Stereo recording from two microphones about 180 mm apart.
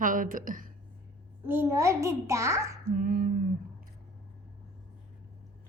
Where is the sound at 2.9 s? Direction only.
50° right (ahead or behind).